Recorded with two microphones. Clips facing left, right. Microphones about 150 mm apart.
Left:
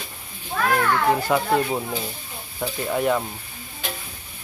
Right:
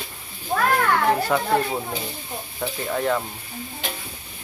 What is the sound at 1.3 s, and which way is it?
Speech, 5° left (ahead or behind).